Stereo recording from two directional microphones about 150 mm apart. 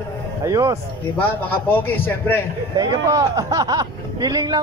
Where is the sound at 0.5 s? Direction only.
25° right (ahead or behind).